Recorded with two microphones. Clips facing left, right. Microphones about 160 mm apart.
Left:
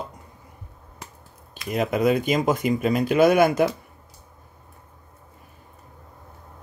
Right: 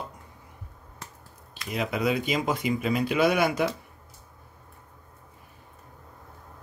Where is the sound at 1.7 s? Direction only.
45° left (ahead or behind).